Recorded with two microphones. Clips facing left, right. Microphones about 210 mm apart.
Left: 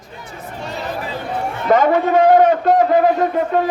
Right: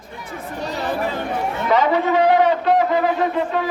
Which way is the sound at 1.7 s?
50° left (ahead or behind).